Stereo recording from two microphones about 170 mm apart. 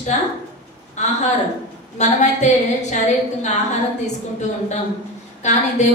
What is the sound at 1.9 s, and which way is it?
A woman's voice, 45° left (ahead or behind).